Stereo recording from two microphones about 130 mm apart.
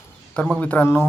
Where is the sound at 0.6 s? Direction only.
15° left (ahead or behind).